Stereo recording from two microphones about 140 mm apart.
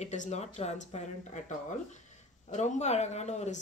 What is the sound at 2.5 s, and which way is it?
Speech, 55° left (ahead or behind).